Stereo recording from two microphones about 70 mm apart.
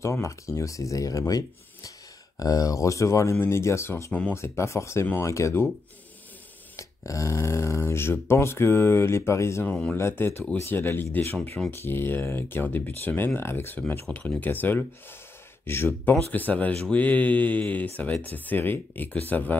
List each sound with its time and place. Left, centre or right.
0.0 s speech: left
6.8 s speech: left
9.7 s speech: centre
9.9 s speech: left
14.1 s speech: centre
14.4 s speech: left
16.3 s speech: left